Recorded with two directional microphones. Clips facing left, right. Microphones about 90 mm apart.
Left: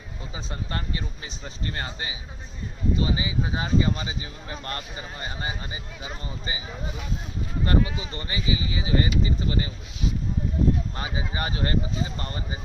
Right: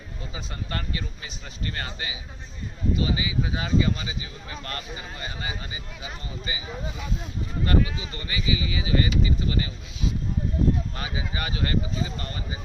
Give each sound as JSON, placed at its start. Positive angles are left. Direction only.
{"t": 0.3, "sound": "speech", "side_deg": 25}
{"t": 7.6, "sound": "speech", "side_deg": 30}
{"t": 10.9, "sound": "speech", "side_deg": 30}